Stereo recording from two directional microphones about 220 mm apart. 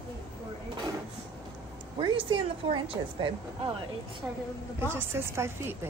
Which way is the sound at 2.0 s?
20° right (ahead or behind).